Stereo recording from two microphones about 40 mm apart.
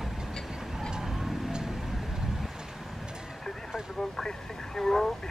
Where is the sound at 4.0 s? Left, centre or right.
Centre.